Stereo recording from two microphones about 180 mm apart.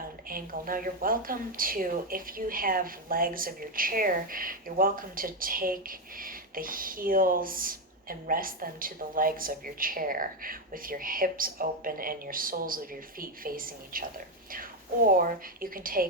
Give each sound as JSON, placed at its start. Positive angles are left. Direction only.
{"t": 0.3, "sound": "speech", "side_deg": -50}